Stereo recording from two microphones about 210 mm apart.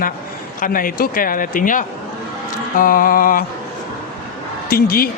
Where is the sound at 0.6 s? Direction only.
40° left (ahead or behind).